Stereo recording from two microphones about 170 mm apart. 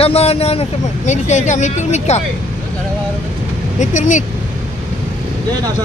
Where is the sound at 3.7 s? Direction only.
45° left (ahead or behind).